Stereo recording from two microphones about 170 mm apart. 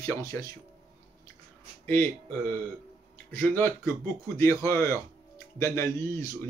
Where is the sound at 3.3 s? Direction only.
10° left (ahead or behind).